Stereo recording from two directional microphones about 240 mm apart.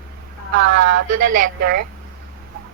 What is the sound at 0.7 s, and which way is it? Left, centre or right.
Speech, right.